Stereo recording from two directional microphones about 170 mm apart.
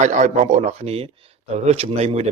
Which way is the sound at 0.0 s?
45° right (ahead or behind).